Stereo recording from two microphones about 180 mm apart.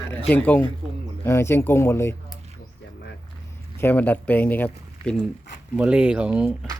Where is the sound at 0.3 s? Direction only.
10° left (ahead or behind).